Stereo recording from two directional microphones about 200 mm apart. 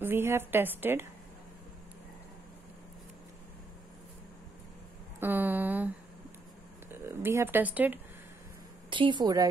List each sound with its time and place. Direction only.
0.0 s a woman's voice: 10° right (ahead or behind)
5.2 s a woman's voice: 10° right (ahead or behind)
6.9 s speech: 10° right (ahead or behind)
8.9 s a woman's voice: 25° right (ahead or behind)